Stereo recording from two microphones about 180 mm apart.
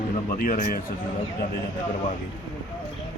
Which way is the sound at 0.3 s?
50° left (ahead or behind).